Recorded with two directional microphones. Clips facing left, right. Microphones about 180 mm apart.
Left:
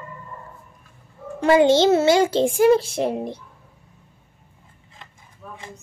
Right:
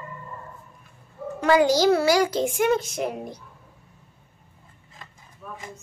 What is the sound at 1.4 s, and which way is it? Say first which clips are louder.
A child's voice: left 3 dB; 25° left (ahead or behind).